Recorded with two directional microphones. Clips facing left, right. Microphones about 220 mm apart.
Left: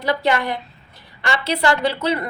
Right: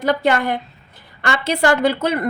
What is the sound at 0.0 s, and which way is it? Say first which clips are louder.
A woman's voice: right 3 dB; 50° right (ahead or behind).